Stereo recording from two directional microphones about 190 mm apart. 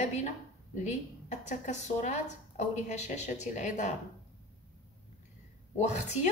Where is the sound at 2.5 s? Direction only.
35° left (ahead or behind).